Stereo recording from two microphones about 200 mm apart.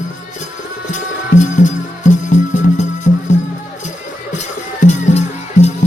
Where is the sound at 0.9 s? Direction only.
40° left (ahead or behind).